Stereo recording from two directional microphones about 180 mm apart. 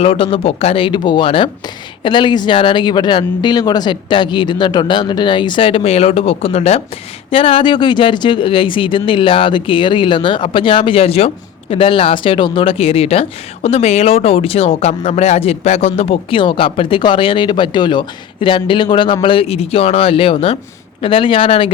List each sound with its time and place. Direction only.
0.0 s speech: 30° left (ahead or behind)